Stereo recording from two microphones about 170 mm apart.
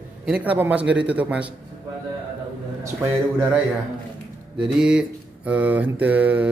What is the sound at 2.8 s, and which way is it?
Speech, 15° right (ahead or behind).